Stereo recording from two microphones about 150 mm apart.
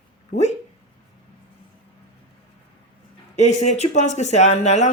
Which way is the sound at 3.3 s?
50° left (ahead or behind).